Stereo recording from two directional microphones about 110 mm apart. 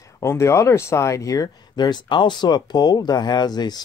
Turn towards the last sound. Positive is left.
turn(degrees=40)  # may be behind; listen again after turning